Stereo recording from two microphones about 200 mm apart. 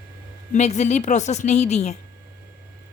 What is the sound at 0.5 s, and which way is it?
A woman's voice, 35° left (ahead or behind).